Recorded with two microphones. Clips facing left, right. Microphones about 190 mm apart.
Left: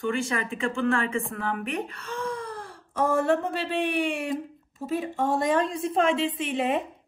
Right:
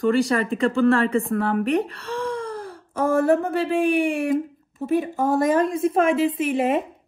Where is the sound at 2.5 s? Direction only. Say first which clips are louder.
Right 2 dB; centre (ahead or behind).